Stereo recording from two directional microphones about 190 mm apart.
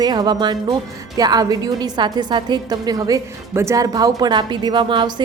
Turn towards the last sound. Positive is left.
turn(degrees=-25)  # may be behind; listen again after turning